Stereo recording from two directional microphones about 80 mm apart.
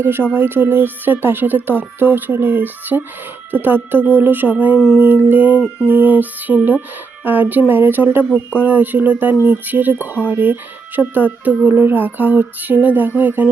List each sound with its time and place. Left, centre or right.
0.0 s speech: right